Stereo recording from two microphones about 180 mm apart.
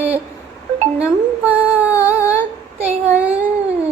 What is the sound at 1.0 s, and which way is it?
Humming, 10° right (ahead or behind).